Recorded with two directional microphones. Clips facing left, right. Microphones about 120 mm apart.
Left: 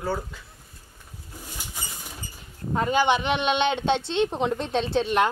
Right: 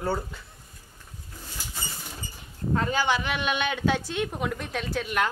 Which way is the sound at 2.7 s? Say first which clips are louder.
Left 4 dB; 20° left (ahead or behind).